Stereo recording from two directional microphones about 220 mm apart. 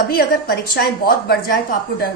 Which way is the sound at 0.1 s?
45° left (ahead or behind).